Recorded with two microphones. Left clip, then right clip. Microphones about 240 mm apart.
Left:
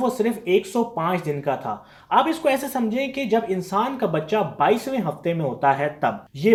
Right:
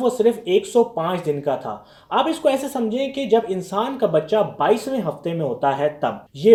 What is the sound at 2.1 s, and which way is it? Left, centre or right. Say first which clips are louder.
Speech: even; left.